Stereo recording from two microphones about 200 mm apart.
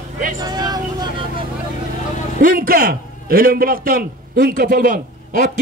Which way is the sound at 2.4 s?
45° right (ahead or behind).